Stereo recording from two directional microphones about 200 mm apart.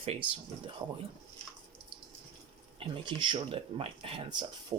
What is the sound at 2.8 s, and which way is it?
Speech, 25° right (ahead or behind).